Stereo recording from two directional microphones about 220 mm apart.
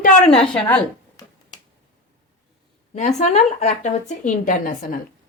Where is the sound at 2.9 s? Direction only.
30° left (ahead or behind).